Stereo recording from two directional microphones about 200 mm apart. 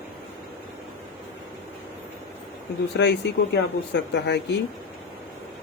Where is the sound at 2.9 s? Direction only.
60° left (ahead or behind).